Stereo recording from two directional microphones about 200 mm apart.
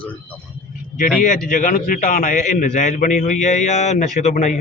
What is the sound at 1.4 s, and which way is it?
A man's voice, 40° left (ahead or behind).